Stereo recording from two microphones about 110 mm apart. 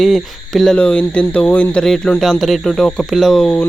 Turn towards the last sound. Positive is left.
turn(degrees=5)  # may be behind; listen again after turning